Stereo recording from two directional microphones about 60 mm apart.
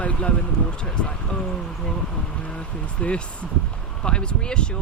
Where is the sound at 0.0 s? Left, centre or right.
Centre.